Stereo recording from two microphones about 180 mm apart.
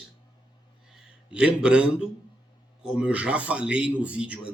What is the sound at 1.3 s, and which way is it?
A man's voice, 5° right (ahead or behind).